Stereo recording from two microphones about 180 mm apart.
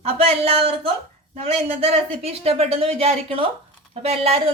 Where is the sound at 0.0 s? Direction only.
35° right (ahead or behind).